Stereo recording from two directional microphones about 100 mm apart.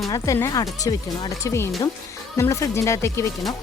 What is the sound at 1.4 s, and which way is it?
Speech, 30° left (ahead or behind).